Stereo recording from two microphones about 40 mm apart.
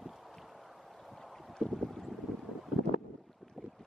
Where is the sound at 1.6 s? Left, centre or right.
Left.